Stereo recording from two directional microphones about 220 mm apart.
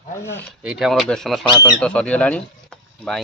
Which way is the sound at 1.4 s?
20° left (ahead or behind).